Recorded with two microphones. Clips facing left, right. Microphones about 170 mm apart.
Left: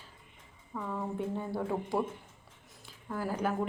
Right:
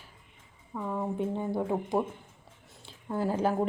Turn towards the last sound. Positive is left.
turn(degrees=-25)  # may be behind; listen again after turning